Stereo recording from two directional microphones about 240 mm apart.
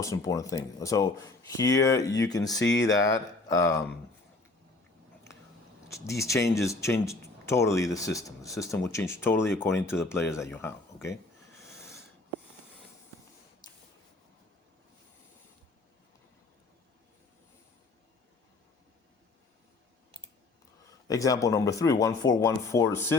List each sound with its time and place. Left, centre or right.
0.0 s speech: centre
2.6 s speech: left
3.0 s speech: centre
6.1 s speech: centre
11.6 s snort: centre
21.1 s speech: centre